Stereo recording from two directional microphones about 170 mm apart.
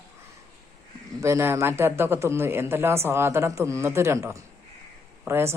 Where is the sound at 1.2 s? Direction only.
15° right (ahead or behind).